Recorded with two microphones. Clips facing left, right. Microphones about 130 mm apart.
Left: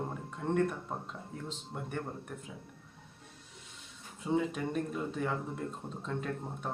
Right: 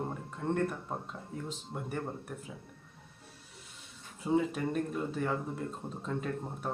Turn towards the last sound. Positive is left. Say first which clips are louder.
# right 1 dB
turn(degrees=0)  # may be behind; listen again after turning